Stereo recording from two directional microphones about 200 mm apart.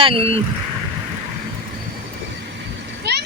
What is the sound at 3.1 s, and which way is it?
Vehicle, 55° right (ahead or behind).